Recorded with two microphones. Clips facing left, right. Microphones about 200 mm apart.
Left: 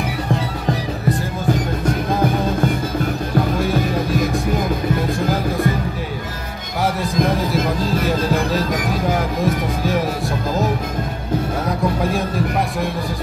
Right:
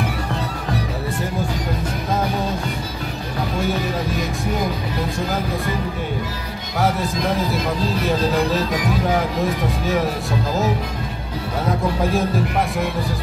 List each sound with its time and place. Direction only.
7.2 s speech: 50° left (ahead or behind)